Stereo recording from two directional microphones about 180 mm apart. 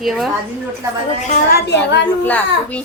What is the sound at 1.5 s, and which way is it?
Speech, 75° left (ahead or behind).